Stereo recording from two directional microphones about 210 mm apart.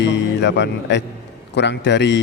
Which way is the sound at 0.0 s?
55° left (ahead or behind).